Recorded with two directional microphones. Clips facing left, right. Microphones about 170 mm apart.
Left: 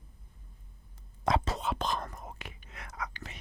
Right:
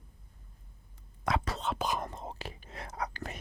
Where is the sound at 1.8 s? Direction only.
10° right (ahead or behind).